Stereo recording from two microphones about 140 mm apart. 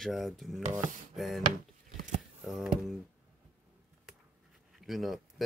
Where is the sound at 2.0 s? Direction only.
60° right (ahead or behind).